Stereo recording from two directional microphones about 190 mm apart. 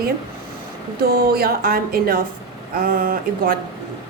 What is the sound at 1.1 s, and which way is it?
A woman's voice, 55° right (ahead or behind).